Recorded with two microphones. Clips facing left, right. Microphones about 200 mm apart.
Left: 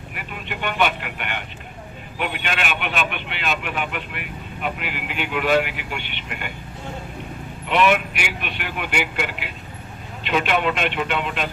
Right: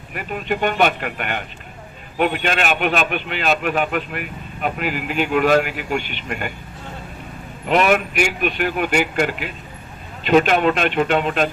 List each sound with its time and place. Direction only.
0.1 s a man's voice: 45° right (ahead or behind)
7.7 s a man's voice: 45° right (ahead or behind)